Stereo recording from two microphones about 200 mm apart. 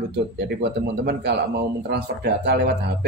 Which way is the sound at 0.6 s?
55° right (ahead or behind).